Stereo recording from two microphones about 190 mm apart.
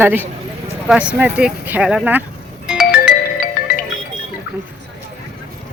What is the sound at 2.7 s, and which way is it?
Music, 5° right (ahead or behind).